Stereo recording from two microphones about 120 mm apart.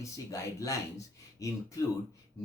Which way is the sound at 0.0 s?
25° left (ahead or behind).